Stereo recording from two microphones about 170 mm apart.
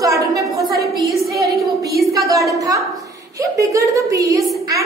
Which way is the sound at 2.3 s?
20° right (ahead or behind).